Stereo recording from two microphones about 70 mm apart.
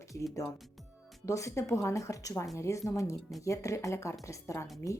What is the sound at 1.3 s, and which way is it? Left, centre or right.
Speech, left.